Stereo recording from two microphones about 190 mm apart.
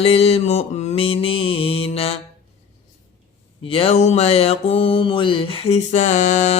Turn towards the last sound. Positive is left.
turn(degrees=40)  # may be behind; listen again after turning